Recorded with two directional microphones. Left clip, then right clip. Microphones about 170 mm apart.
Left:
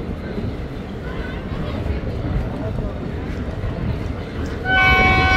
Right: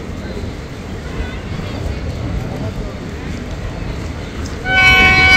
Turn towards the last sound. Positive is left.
turn(degrees=15)  # may be behind; listen again after turning